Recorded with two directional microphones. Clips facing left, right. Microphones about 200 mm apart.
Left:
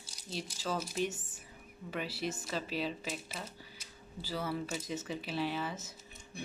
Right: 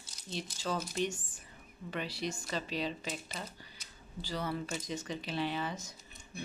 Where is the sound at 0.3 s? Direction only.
5° left (ahead or behind).